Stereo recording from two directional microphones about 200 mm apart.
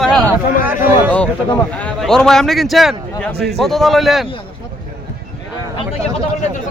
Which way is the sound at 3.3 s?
55° right (ahead or behind).